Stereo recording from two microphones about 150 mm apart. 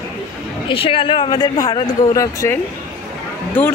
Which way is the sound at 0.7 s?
35° left (ahead or behind).